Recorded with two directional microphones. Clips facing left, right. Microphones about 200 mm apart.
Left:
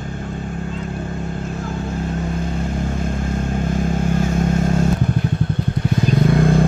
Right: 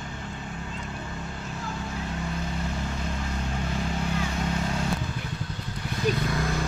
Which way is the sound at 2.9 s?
50° left (ahead or behind).